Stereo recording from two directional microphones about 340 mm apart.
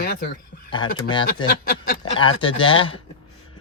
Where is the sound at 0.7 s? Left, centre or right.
Centre.